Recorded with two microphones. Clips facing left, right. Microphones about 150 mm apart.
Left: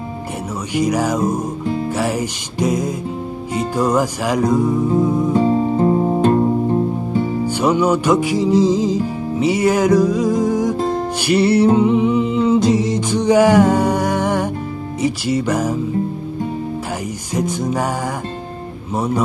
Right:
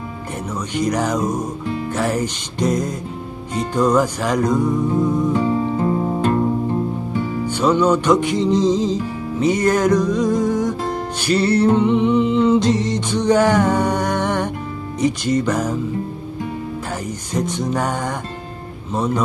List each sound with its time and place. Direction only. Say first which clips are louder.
0.7 s music: left 2 dB; 5° left (ahead or behind)
5.3 s music: left 3 dB; 30° left (ahead or behind)
7.4 s music: right 1 dB; 10° left (ahead or behind)
17.3 s music: left 2 dB; 10° left (ahead or behind)